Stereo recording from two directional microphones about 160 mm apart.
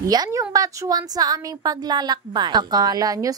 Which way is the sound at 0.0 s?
20° right (ahead or behind).